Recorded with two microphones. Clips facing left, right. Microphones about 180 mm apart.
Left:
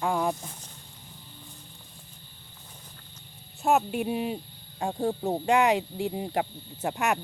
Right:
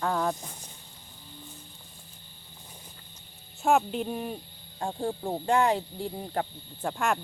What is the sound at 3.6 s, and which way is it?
Speech, centre (ahead or behind).